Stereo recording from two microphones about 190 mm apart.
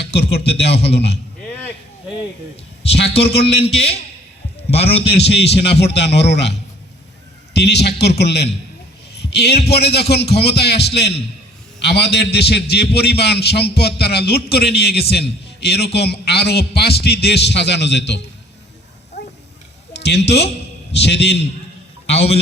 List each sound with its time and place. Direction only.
0.1 s a man's voice: 60° left (ahead or behind)
3.2 s a man's voice: 60° left (ahead or behind)
4.7 s a man's voice: 30° left (ahead or behind)
5.1 s a man's voice: 60° left (ahead or behind)
9.1 s a sound: 60° left (ahead or behind)
9.6 s a man's voice: 60° left (ahead or behind)
19.2 s a sound: 65° left (ahead or behind)
19.9 s a man's voice: 65° left (ahead or behind)
22.0 s a sound: 30° left (ahead or behind)